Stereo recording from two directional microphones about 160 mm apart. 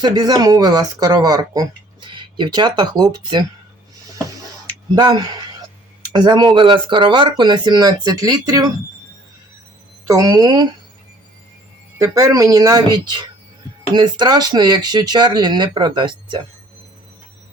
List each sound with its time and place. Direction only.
0.0 s speech: 25° right (ahead or behind)
4.9 s speech: 25° right (ahead or behind)
10.1 s speech: 25° right (ahead or behind)
11.9 s speech: 20° right (ahead or behind)